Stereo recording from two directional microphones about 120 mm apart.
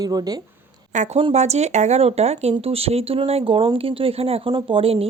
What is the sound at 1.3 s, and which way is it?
Speech, 70° right (ahead or behind).